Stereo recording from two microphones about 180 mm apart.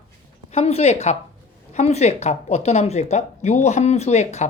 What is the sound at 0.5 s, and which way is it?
Speech, 35° left (ahead or behind).